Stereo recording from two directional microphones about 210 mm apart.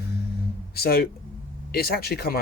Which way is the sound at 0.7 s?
45° left (ahead or behind).